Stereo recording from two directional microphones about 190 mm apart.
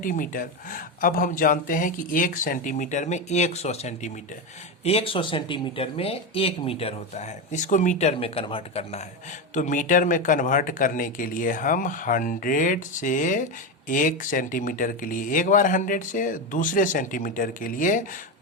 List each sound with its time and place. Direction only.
0.0 s speech: 45° left (ahead or behind); by 9.0 s 30° left (ahead or behind)
9.6 s speech: 40° left (ahead or behind)